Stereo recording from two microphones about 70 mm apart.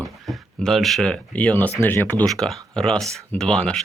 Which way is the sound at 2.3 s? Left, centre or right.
Centre.